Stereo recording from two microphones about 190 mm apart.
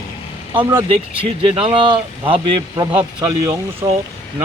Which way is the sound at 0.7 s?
25° right (ahead or behind).